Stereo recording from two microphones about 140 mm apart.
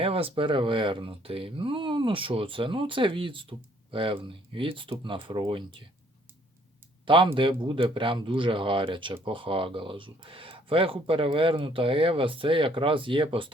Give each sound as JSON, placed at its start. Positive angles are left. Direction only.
{"t": 0.0, "sound": "speech", "side_deg": -40}
{"t": 7.0, "sound": "speech", "side_deg": -35}